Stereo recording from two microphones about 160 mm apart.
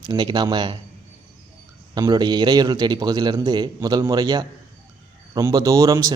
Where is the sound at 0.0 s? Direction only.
25° right (ahead or behind).